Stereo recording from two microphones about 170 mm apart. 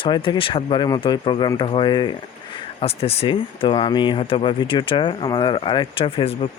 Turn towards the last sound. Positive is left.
turn(degrees=30)  # may be behind; listen again after turning